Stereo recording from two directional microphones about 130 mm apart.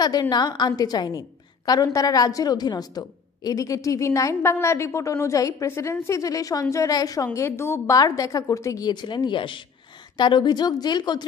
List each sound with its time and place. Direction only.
0.0 s a woman's voice: 30° left (ahead or behind)